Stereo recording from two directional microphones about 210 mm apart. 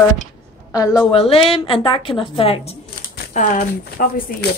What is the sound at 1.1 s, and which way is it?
A woman's voice, 25° left (ahead or behind).